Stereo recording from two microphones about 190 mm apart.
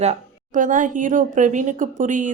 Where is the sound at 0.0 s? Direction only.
40° right (ahead or behind).